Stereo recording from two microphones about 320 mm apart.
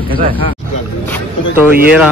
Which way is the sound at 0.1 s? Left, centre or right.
Right.